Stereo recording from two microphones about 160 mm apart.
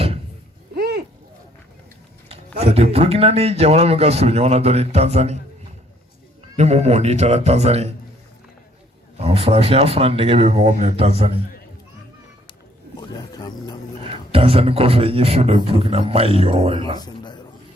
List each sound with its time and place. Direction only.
0.8 s a sound: 80° right
2.3 s speech: 40° right (ahead or behind)
6.6 s a man's voice: 45° right (ahead or behind)
9.1 s speech: 40° right (ahead or behind)
13.0 s a sound: 25° left (ahead or behind)
14.0 s speech: 35° right (ahead or behind)